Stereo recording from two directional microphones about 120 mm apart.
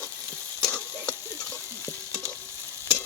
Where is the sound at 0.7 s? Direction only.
20° left (ahead or behind).